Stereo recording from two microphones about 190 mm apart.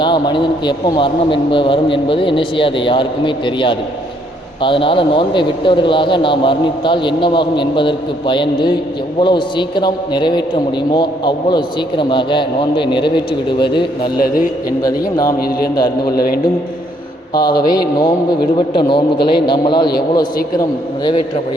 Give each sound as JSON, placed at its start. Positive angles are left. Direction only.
{"t": 0.0, "sound": "a man's voice", "side_deg": 25}
{"t": 14.2, "sound": "a man's voice", "side_deg": 45}
{"t": 14.8, "sound": "a man's voice", "side_deg": 20}
{"t": 17.3, "sound": "a man's voice", "side_deg": 20}